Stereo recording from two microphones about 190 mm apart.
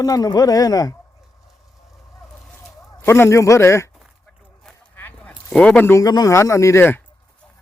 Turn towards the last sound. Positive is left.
turn(degrees=15)  # may be behind; listen again after turning